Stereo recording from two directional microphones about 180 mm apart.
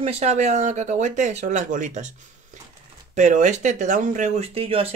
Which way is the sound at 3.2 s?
40° right (ahead or behind).